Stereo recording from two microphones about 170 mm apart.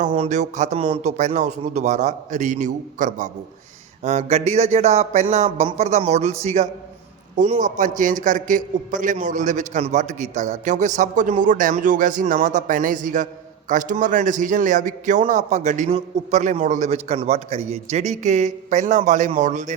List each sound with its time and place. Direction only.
0.3 s a man's voice: 45° right (ahead or behind)